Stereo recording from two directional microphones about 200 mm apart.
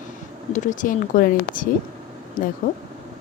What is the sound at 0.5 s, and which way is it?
Speech, 40° left (ahead or behind).